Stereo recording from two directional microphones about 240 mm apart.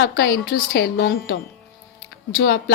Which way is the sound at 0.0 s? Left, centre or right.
Left.